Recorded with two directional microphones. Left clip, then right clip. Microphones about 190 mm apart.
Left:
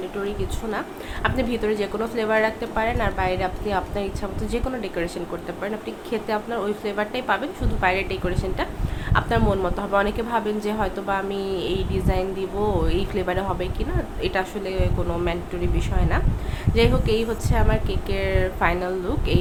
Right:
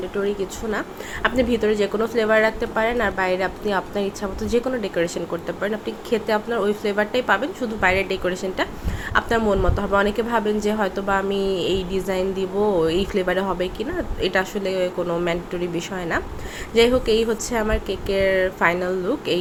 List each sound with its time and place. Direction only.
0.7 s a woman's voice: 20° right (ahead or behind)